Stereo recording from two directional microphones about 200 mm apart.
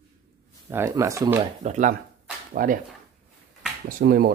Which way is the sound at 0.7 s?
15° right (ahead or behind).